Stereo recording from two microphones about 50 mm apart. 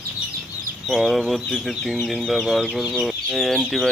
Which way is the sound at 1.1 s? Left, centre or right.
Centre.